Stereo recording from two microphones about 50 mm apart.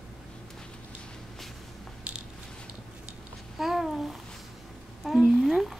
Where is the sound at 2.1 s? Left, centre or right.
Right.